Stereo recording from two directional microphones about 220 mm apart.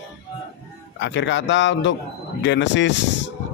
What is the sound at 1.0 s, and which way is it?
Speech, 55° left (ahead or behind).